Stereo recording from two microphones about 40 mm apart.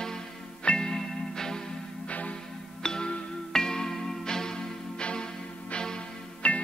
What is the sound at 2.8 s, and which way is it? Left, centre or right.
Music, centre.